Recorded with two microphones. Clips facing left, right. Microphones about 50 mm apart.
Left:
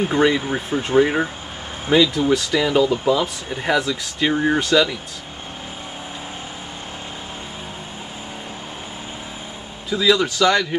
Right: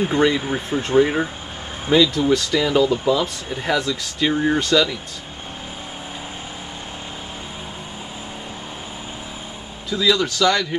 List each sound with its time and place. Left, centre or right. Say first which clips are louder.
0.0 s speech: left 1 dB; centre
9.8 s speech: left 2 dB; centre